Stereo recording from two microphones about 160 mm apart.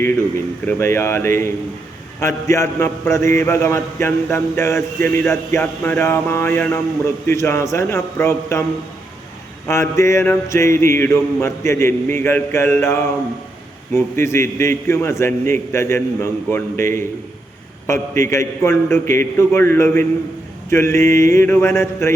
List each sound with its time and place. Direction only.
0.0 s a man's voice: 15° left (ahead or behind)
9.6 s a man's voice: 15° left (ahead or behind)